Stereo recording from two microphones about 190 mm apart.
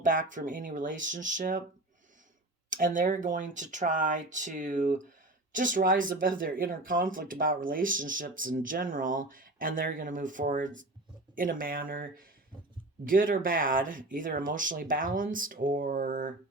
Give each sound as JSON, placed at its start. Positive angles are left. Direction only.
{"t": 0.0, "sound": "speech", "side_deg": -45}
{"t": 2.6, "sound": "speech", "side_deg": -45}